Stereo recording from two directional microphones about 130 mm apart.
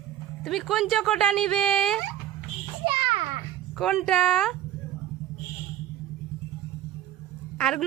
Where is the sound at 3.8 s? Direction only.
Centre (ahead or behind).